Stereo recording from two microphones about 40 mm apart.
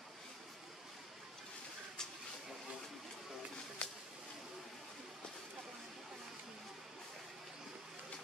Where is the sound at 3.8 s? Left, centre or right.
Left.